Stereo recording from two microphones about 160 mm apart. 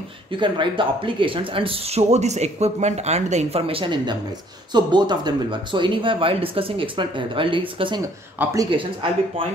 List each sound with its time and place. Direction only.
0.4 s speech: 30° right (ahead or behind)